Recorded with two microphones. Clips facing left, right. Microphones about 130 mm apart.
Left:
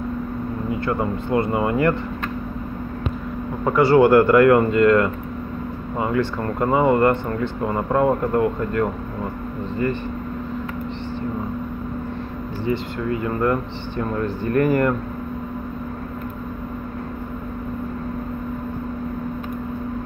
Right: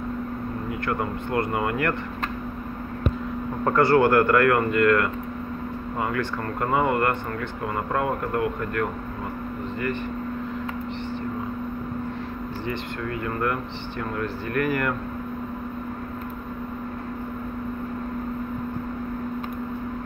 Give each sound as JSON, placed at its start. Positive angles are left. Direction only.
{"t": 0.7, "sound": "speech", "side_deg": 20}
{"t": 3.6, "sound": "speech", "side_deg": 20}
{"t": 12.6, "sound": "speech", "side_deg": 20}